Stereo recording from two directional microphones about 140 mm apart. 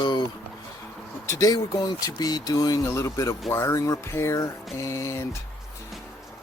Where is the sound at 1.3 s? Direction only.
25° left (ahead or behind).